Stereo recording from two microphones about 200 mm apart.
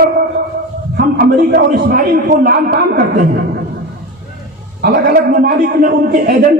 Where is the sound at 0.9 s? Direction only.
50° right (ahead or behind).